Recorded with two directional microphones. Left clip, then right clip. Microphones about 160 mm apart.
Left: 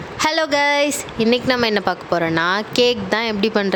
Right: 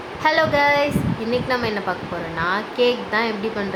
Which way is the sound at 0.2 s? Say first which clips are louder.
Even; 85° left.